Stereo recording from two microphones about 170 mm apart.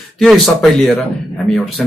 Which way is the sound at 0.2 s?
Centre (ahead or behind).